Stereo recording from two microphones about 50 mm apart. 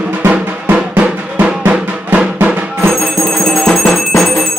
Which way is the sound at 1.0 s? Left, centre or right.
Right.